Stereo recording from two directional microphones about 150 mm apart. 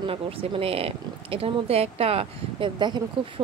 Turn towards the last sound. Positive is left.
turn(degrees=-30)  # may be behind; listen again after turning